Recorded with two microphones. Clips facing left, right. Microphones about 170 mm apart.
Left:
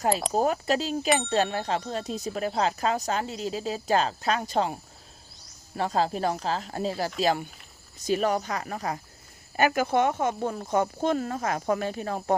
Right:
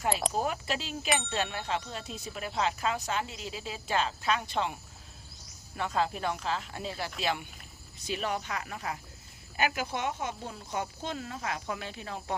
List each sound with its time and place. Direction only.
0.3 s speech: 40° left (ahead or behind)